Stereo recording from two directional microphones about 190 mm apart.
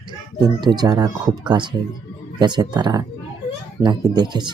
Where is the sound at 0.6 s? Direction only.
20° right (ahead or behind).